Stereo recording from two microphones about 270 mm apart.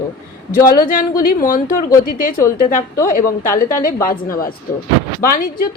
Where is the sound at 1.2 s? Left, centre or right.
Left.